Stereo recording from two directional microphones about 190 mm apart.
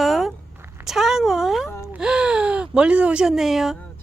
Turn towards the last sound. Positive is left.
turn(degrees=0)  # may be behind; listen again after turning